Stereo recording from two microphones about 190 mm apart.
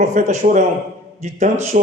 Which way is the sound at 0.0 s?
40° right (ahead or behind).